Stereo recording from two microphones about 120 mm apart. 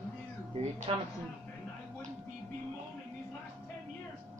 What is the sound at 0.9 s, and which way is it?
Speech, 50° right (ahead or behind).